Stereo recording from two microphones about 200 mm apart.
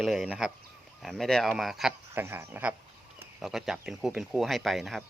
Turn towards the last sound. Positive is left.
turn(degrees=0)  # may be behind; listen again after turning